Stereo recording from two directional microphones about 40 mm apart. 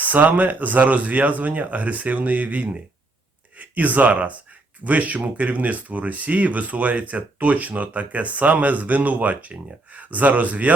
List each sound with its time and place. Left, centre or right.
0.0 s speech: right